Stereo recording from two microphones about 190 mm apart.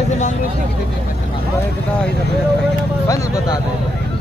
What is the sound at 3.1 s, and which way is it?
Speech, 15° left (ahead or behind).